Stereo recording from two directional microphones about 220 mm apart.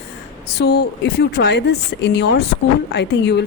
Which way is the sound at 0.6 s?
50° left (ahead or behind).